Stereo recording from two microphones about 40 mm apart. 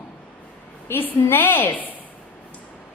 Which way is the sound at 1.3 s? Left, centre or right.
Left.